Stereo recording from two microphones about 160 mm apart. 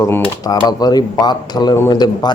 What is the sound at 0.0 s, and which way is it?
Speech, 20° left (ahead or behind).